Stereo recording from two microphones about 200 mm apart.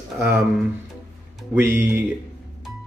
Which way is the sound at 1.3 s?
10° right (ahead or behind).